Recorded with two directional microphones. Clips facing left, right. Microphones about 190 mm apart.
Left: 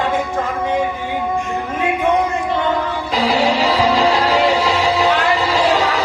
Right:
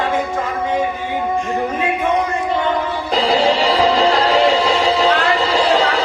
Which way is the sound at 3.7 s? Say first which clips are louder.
Right 1 dB; 20° right (ahead or behind).